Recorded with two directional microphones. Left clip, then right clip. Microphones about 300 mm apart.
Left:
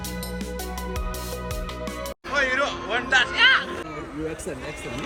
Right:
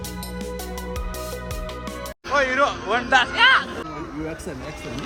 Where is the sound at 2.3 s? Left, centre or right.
Right.